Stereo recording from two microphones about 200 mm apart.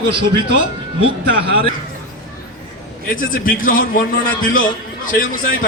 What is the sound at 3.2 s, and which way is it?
A man's voice, 45° left (ahead or behind).